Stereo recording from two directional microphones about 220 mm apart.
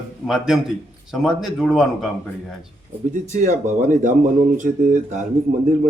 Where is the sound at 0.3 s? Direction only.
Centre (ahead or behind).